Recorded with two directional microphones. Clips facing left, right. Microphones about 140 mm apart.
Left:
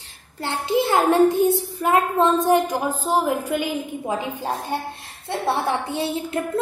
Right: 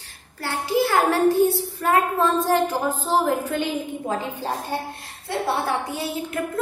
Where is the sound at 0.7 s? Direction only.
20° left (ahead or behind).